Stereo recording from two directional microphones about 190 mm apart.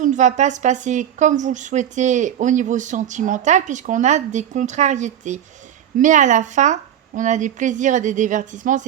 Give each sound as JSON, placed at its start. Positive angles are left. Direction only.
{"t": 0.0, "sound": "speech", "side_deg": -40}